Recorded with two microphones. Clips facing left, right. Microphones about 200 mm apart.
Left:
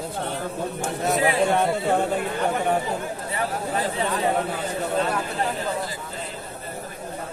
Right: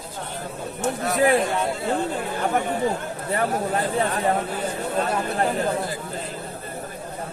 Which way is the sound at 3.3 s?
55° right (ahead or behind).